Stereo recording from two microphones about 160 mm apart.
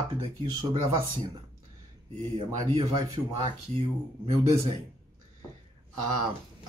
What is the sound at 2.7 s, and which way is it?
Speech, 35° right (ahead or behind).